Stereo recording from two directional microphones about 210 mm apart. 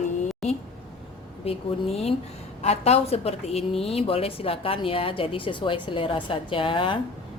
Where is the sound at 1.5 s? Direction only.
30° left (ahead or behind).